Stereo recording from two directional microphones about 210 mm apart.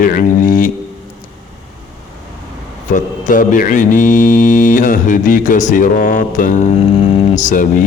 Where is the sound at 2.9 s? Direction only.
40° left (ahead or behind).